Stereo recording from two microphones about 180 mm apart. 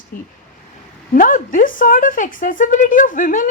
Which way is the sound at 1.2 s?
50° left (ahead or behind).